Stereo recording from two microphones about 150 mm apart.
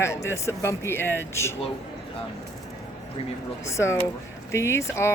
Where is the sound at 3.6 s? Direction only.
20° left (ahead or behind).